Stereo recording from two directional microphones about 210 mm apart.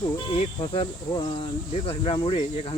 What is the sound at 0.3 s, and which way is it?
Speech, 25° left (ahead or behind).